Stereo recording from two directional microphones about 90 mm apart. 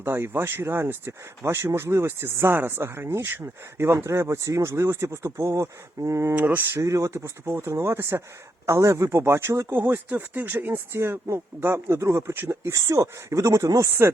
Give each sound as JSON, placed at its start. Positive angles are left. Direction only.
{"t": 0.0, "sound": "speech", "side_deg": -25}
{"t": 6.3, "sound": "speech", "side_deg": -20}
{"t": 6.8, "sound": "speech", "side_deg": -35}